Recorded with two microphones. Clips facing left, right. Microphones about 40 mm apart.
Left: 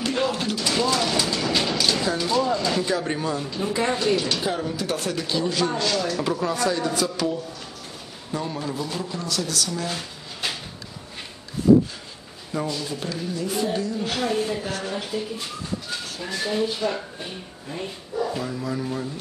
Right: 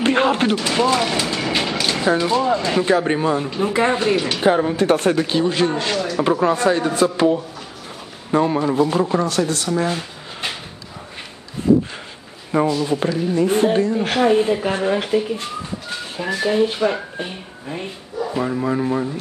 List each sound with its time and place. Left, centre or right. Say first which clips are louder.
0.0 s speech: right 8 dB; right
12.6 s speech: right 10 dB; right
13.0 s speech: right 10 dB; right
16.4 s speech: right 7 dB; right